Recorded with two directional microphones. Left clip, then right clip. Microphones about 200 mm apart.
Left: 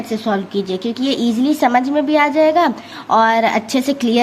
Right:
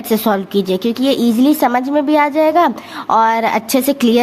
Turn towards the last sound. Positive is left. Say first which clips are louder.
# right 3 dB
turn(degrees=-30)  # may be behind; listen again after turning